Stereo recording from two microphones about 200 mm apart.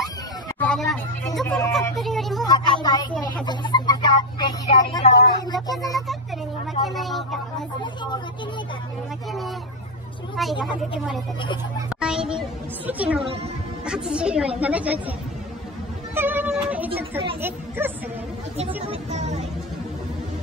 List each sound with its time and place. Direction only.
0.6 s speech: 5° left (ahead or behind)
2.0 s a sound: centre (ahead or behind)
2.4 s a sound: 20° left (ahead or behind)
3.4 s speech: 20° left (ahead or behind)
6.9 s speech: centre (ahead or behind)
7.8 s speech: 25° left (ahead or behind)
10.6 s a woman's voice: centre (ahead or behind)
16.2 s music: 10° right (ahead or behind)
17.4 s a woman's voice: 10° right (ahead or behind)
18.9 s speech: 35° right (ahead or behind)